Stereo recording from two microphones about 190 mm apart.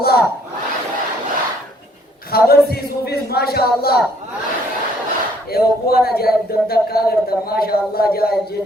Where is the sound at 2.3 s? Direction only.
55° left (ahead or behind).